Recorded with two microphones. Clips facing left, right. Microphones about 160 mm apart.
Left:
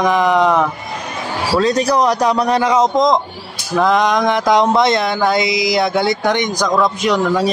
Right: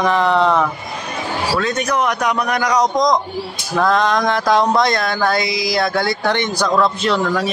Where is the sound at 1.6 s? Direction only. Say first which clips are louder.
Left 7 dB; 35° left (ahead or behind); by 7.2 s 15° left (ahead or behind).